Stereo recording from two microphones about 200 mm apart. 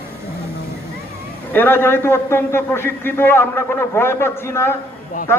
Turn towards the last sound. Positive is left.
turn(degrees=40)  # may be behind; listen again after turning